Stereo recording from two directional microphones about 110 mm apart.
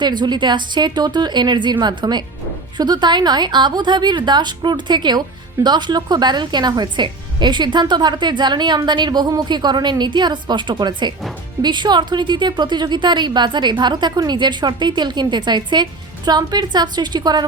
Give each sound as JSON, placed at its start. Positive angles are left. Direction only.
{"t": 0.0, "sound": "a woman's voice", "side_deg": -40}